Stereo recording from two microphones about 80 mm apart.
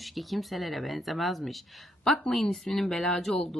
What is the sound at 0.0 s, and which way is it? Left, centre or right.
Speech, centre.